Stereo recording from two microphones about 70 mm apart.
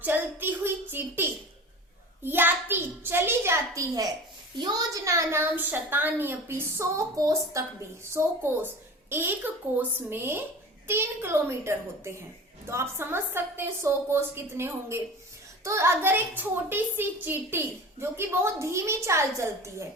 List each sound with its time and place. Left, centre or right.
0.0 s child singing: right
2.2 s a sound: right
4.5 s a child's voice: right
5.0 s a woman's voice: right
5.4 s a woman's voice: right
7.2 s a woman's voice: right
8.1 s a woman's voice: right